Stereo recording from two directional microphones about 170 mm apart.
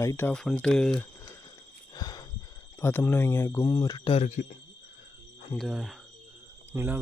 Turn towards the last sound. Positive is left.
turn(degrees=-15)  # may be behind; listen again after turning